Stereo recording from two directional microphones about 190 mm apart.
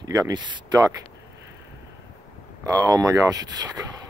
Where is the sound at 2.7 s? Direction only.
15° right (ahead or behind).